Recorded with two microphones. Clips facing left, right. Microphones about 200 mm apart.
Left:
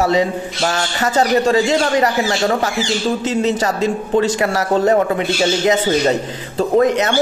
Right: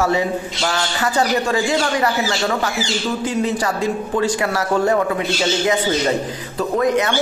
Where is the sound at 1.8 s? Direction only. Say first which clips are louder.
Left 3 dB; 45° left (ahead or behind).